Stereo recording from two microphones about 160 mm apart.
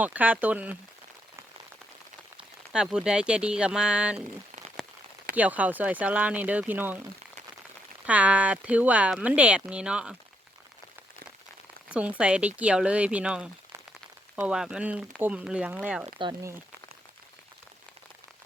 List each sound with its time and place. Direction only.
0.0 s speech: 10° right (ahead or behind)
2.4 s speech: 5° right (ahead or behind)
5.3 s speech: 10° right (ahead or behind)
8.0 s speech: 10° right (ahead or behind)
11.9 s speech: 10° right (ahead or behind)
16.0 s speech: 30° right (ahead or behind)